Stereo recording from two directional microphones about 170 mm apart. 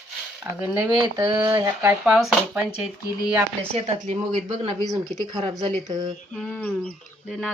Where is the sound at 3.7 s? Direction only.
40° right (ahead or behind).